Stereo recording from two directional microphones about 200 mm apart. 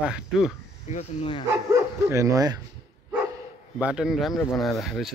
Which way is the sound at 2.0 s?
15° right (ahead or behind).